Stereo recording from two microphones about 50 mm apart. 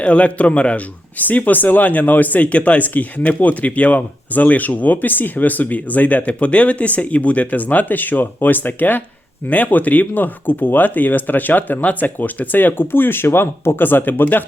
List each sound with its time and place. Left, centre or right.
0.0 s speech: left